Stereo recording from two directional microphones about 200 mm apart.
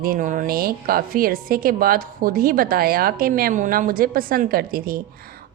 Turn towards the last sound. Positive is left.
turn(degrees=-45)  # may be behind; listen again after turning